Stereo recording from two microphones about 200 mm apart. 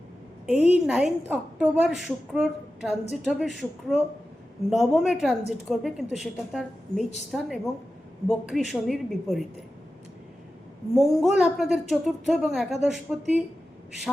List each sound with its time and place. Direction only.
0.6 s a woman's voice: 5° right (ahead or behind)
10.9 s a woman's voice: centre (ahead or behind)